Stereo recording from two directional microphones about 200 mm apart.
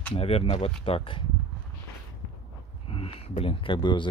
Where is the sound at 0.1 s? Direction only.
30° left (ahead or behind).